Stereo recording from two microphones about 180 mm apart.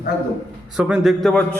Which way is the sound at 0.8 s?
Centre (ahead or behind).